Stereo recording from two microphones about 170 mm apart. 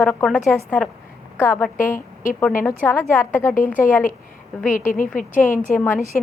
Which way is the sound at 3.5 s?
50° left (ahead or behind).